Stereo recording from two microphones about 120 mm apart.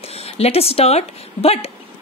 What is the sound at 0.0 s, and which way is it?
A woman's voice, 60° left (ahead or behind).